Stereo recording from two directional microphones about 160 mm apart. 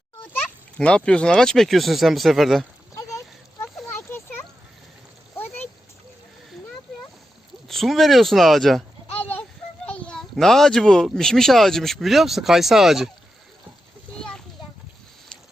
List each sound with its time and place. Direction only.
0.3 s a child's voice: 5° left (ahead or behind)
3.8 s a sound: 15° left (ahead or behind)
7.7 s a child's voice: centre (ahead or behind)
14.2 s children playing: 5° left (ahead or behind)